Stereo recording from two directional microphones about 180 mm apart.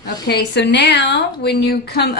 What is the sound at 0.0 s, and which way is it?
A woman's voice, 65° left (ahead or behind).